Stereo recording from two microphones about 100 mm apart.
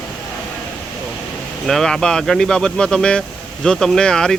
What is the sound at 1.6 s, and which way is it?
Speech, 5° left (ahead or behind).